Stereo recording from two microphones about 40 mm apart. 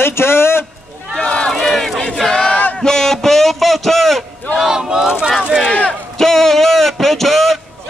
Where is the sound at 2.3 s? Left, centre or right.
Centre.